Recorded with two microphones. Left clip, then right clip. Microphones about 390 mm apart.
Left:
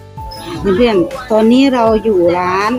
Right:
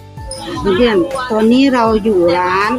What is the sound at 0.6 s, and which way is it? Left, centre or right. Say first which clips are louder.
Speech: left 1 dB; left.